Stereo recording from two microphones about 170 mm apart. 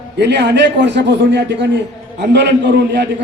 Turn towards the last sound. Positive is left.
turn(degrees=-90)